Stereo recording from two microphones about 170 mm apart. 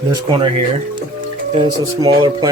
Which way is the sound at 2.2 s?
25° right (ahead or behind).